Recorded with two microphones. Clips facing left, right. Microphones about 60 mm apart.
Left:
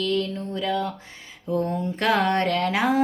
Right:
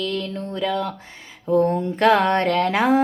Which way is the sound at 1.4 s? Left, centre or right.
Right.